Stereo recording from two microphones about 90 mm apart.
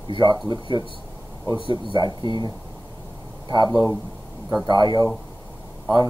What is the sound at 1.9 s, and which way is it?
Speech, 55° right (ahead or behind).